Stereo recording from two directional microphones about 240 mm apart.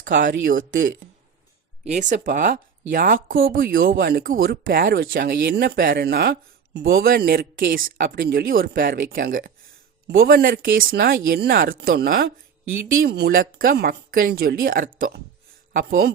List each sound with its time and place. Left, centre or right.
0.0 s speech: right
1.8 s speech: right